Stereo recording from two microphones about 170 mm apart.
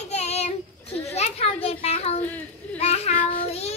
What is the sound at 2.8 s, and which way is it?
Child singing, 40° left (ahead or behind).